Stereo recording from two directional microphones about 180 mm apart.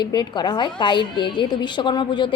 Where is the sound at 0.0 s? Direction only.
25° left (ahead or behind).